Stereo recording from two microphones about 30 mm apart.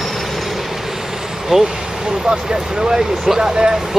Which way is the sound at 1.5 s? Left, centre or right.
Right.